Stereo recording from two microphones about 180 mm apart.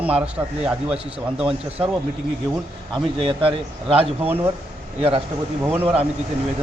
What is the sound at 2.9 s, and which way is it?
A man's voice, 30° right (ahead or behind).